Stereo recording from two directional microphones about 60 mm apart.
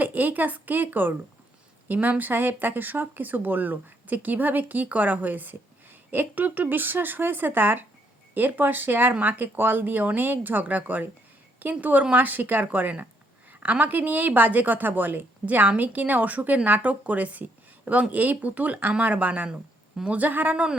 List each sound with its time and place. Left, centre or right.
0.0 s a woman's voice: right
9.1 s a woman's voice: right
9.4 s a woman's voice: right